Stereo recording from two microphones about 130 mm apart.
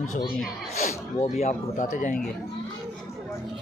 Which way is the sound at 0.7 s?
60° left (ahead or behind).